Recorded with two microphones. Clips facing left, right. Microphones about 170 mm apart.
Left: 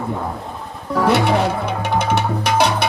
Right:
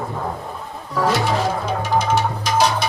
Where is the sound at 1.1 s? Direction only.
65° left (ahead or behind).